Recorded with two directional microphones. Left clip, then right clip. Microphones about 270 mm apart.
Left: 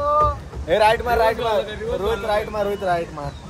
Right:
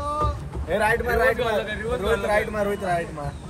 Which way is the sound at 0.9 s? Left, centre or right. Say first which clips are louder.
Left 3 dB; centre.